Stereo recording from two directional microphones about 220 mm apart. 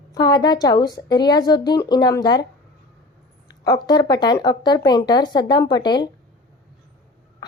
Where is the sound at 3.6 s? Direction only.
20° left (ahead or behind).